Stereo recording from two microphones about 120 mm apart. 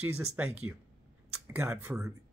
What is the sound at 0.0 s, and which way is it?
Speech, 10° right (ahead or behind).